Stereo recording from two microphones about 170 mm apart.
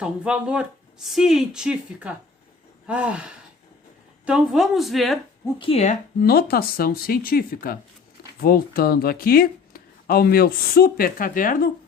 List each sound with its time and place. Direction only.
0.0 s speech: 5° right (ahead or behind)
4.3 s speech: 5° right (ahead or behind)
5.5 s speech: 35° left (ahead or behind)
6.2 s speech: 65° left (ahead or behind)